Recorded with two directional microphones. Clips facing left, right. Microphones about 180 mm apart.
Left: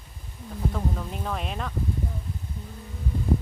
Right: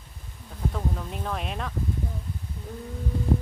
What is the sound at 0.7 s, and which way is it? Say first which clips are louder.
Speech: even; centre (ahead or behind).